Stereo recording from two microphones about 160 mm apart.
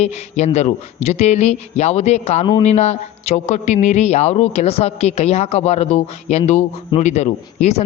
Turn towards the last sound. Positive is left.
turn(degrees=45)  # may be behind; listen again after turning